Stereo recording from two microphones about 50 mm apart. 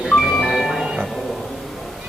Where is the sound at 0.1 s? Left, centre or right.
Centre.